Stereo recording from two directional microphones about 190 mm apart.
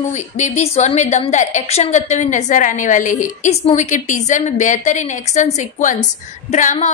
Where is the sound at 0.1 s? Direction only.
35° left (ahead or behind).